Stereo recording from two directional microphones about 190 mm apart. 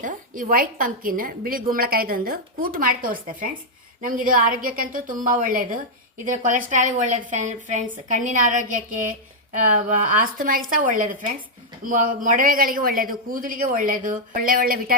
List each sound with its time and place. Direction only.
0.0 s a woman's voice: 45° right (ahead or behind)